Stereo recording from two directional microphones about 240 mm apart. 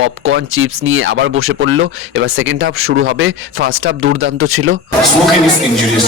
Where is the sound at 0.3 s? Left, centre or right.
Right.